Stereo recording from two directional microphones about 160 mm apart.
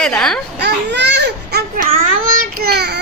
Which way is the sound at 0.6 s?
90° right.